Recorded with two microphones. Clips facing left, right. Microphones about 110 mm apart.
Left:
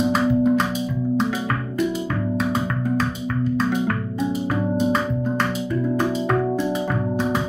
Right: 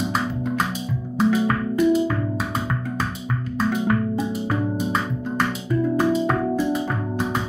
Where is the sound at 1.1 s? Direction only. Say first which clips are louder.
Right 6 dB; centre (ahead or behind).